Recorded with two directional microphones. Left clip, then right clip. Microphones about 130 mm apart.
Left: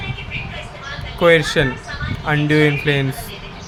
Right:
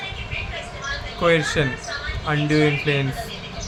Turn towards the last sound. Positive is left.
turn(degrees=45)  # may be behind; listen again after turning